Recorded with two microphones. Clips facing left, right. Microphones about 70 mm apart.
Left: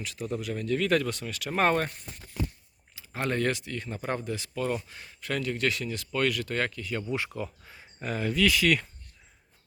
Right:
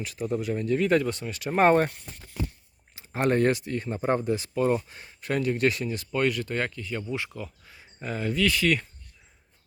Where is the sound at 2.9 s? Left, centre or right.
Right.